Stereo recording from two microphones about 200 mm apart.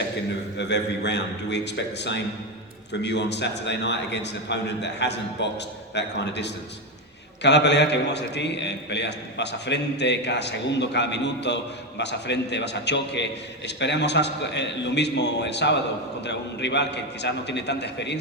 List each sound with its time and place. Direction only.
0.7 s a man's voice: 60° left (ahead or behind)